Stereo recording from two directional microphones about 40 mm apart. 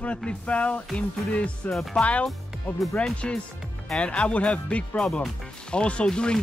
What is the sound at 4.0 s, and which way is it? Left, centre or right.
Speech, left.